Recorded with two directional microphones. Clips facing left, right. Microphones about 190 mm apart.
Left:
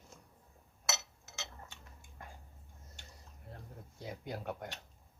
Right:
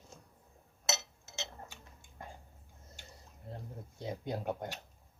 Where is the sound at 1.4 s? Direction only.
25° right (ahead or behind).